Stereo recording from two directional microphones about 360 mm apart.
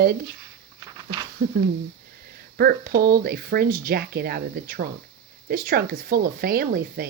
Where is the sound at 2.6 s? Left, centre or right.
Right.